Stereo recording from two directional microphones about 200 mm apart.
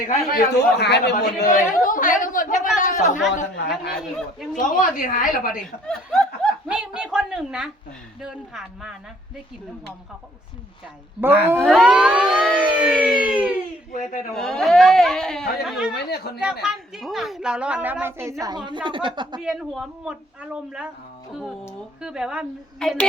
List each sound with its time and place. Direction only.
0.1 s a man's voice: 45° left (ahead or behind)
4.5 s a woman's voice: 40° left (ahead or behind)
5.9 s speech: 5° left (ahead or behind)
8.2 s siren: centre (ahead or behind)
11.2 s a woman's voice: 10° right (ahead or behind)
11.6 s siren: centre (ahead or behind)
13.9 s a woman's voice: 40° left (ahead or behind)
14.3 s siren: centre (ahead or behind)
16.0 s a man's voice: 55° left (ahead or behind)
16.4 s a woman's voice: 5° right (ahead or behind); by 19.4 s 25° right (ahead or behind)
19.4 s siren: centre (ahead or behind)
22.0 s siren: 5° right (ahead or behind)